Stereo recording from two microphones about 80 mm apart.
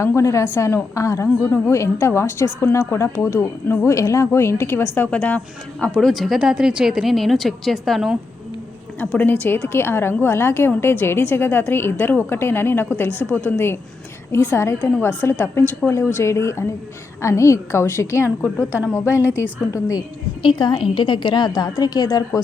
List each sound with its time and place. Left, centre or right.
0.0 s speech: left
5.1 s speech: centre
5.9 s speech: centre
9.0 s a woman's voice: left
20.4 s a woman's voice: left